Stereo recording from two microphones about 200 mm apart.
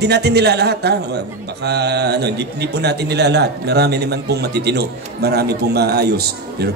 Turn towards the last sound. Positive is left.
turn(degrees=-55)  # may be behind; listen again after turning